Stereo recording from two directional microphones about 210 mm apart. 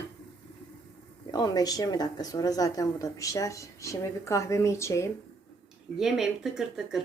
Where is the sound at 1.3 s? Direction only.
20° left (ahead or behind).